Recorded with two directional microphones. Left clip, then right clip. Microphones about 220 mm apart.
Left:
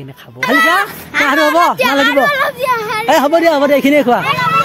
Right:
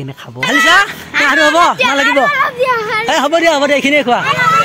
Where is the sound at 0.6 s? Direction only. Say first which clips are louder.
Right 3 dB; 10° left (ahead or behind).